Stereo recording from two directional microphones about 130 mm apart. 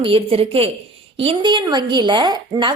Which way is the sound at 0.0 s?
45° right (ahead or behind).